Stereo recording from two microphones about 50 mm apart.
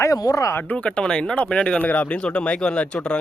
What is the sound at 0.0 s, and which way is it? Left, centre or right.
Speech, left.